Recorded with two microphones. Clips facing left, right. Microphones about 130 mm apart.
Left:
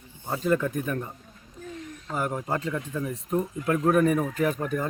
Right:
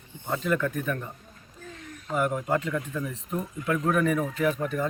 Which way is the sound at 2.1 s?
35° left (ahead or behind).